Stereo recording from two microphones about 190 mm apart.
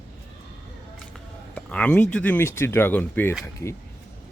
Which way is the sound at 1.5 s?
5° left (ahead or behind).